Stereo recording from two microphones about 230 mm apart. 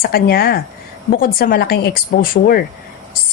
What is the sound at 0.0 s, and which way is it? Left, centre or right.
A woman's voice, left.